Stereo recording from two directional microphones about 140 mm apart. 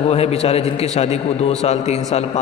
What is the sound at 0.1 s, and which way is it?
Speech, 45° left (ahead or behind).